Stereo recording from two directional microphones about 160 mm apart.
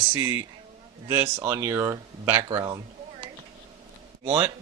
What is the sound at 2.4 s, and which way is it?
Speech, 35° right (ahead or behind).